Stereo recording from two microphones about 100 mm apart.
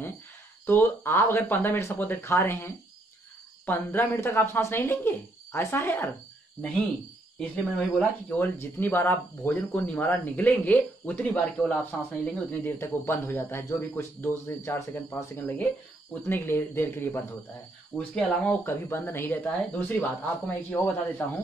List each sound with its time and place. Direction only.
0.7 s speech: 20° left (ahead or behind)
7.3 s speech: 15° left (ahead or behind)
17.9 s speech: 10° left (ahead or behind)
18.6 s speech: 25° left (ahead or behind)